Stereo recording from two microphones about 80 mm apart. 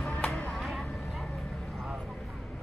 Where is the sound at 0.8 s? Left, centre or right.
Centre.